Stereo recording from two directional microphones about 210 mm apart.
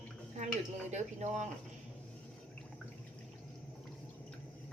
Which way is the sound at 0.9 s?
35° right (ahead or behind).